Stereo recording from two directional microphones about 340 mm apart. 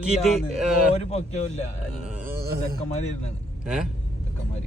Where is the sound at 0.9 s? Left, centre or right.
Centre.